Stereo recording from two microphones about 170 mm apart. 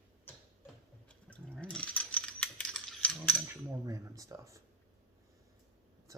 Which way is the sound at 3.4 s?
20° right (ahead or behind).